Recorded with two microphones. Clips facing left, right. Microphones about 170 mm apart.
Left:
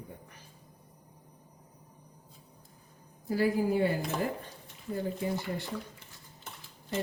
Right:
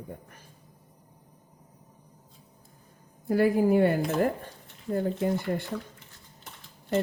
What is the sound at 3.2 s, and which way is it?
Speech, 60° right (ahead or behind).